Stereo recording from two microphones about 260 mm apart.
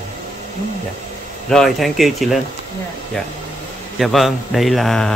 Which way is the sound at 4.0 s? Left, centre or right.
Centre.